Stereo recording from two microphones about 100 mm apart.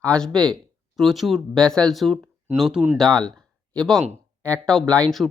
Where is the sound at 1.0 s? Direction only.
Centre (ahead or behind).